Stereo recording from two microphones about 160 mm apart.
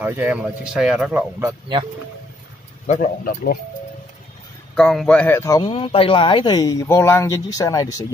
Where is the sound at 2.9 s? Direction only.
60° left (ahead or behind).